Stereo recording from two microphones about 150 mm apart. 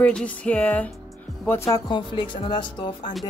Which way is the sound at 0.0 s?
10° left (ahead or behind).